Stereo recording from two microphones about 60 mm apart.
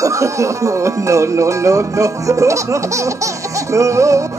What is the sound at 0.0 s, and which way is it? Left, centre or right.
Speech, right.